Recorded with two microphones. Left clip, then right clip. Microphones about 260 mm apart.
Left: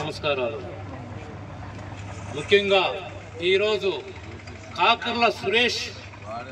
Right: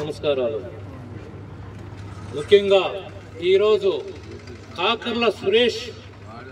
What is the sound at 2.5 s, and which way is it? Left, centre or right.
A man's voice, centre.